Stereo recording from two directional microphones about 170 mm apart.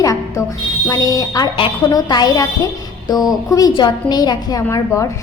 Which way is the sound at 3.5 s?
20° left (ahead or behind).